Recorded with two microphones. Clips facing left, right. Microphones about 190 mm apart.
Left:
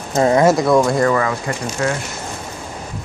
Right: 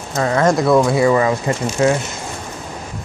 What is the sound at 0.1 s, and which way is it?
Speech, 25° left (ahead or behind).